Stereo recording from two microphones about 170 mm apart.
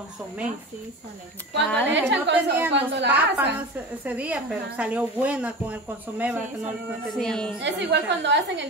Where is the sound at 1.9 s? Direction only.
90° right.